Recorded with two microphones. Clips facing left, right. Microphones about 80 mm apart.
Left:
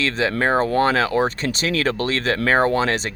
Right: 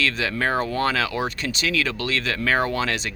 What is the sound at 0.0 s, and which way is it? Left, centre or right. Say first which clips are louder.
Speech: left 3 dB; left.